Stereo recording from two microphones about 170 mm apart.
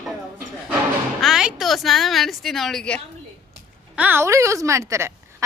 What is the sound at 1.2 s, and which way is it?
A woman's voice, 5° right (ahead or behind).